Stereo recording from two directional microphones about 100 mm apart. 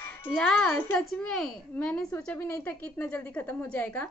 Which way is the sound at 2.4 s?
20° left (ahead or behind).